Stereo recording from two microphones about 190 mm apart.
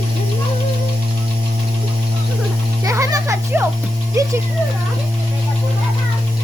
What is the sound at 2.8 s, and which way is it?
Music, 15° right (ahead or behind).